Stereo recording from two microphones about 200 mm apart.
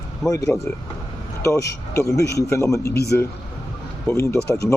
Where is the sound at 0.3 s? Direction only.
15° left (ahead or behind).